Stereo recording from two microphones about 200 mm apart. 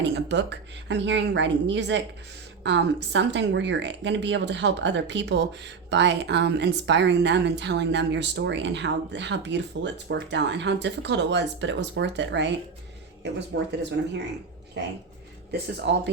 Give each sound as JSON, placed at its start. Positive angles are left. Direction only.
{"t": 0.0, "sound": "a woman's voice", "side_deg": -60}
{"t": 15.5, "sound": "a woman's voice", "side_deg": -60}